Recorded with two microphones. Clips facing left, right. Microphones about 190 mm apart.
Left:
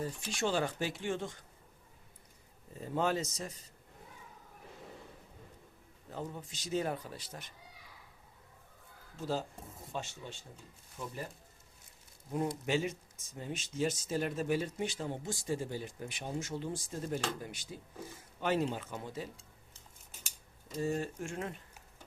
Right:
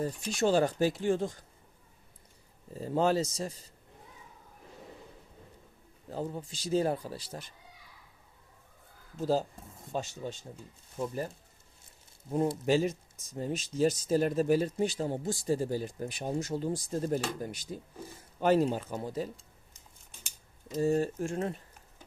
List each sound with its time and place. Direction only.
0.0 s speech: 40° right (ahead or behind)
2.7 s speech: 35° right (ahead or behind)
6.1 s speech: 35° right (ahead or behind)
9.9 s speech: 40° right (ahead or behind)
12.3 s speech: 35° right (ahead or behind)
20.7 s speech: 40° right (ahead or behind)